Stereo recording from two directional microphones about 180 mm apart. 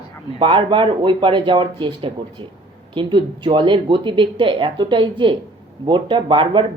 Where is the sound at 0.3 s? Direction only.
30° right (ahead or behind).